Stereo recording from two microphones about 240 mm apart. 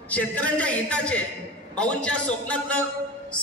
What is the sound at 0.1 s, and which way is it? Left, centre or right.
A man's voice, centre.